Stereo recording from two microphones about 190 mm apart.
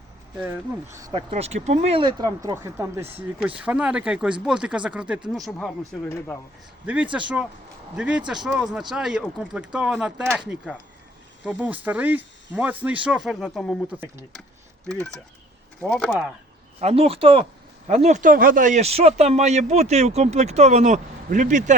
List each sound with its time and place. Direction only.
0.3 s speech: 10° right (ahead or behind)
1.1 s speech: 35° right (ahead or behind); by 5.2 s 5° right (ahead or behind)
5.5 s speech: 5° left (ahead or behind)
6.8 s speech: 5° right (ahead or behind)
16.0 s speech: 5° right (ahead or behind)
16.8 s speech: 30° right (ahead or behind)